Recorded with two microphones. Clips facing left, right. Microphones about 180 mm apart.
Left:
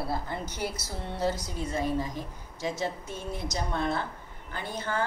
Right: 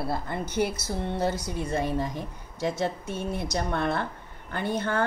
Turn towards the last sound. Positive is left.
turn(degrees=-60)  # may be behind; listen again after turning